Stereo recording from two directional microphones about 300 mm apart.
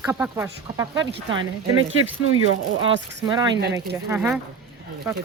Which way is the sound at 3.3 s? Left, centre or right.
Centre.